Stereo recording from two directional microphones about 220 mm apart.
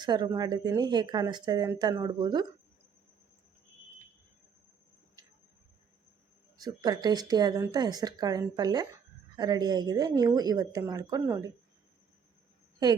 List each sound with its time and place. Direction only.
0.0 s speech: 20° right (ahead or behind)
6.6 s a woman's voice: 15° right (ahead or behind)